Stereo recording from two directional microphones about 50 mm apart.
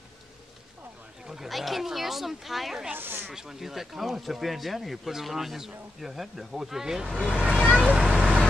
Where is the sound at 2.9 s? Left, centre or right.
Right.